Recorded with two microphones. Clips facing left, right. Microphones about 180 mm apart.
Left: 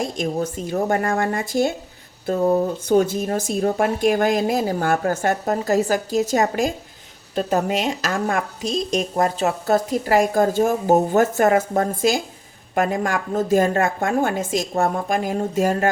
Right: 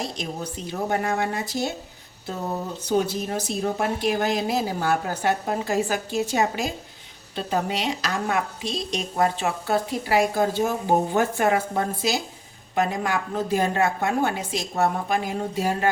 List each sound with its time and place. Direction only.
0.0 s a woman's voice: 50° left (ahead or behind)
2.8 s a woman's voice: 50° left (ahead or behind)